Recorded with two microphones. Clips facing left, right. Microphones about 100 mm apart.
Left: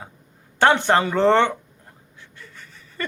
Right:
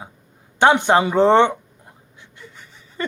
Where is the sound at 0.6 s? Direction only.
15° right (ahead or behind).